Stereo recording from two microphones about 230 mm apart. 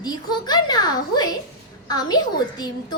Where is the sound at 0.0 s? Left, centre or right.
Centre.